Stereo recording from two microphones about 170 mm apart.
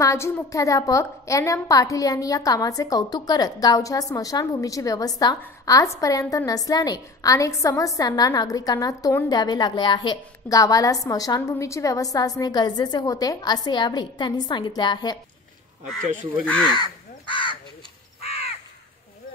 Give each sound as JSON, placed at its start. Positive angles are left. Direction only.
{"t": 0.0, "sound": "a woman's voice", "side_deg": 15}
{"t": 16.4, "sound": "speech", "side_deg": 5}
{"t": 16.7, "sound": "crow", "side_deg": 30}